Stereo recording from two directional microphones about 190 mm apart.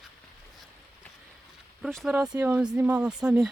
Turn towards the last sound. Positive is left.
turn(degrees=-5)  # may be behind; listen again after turning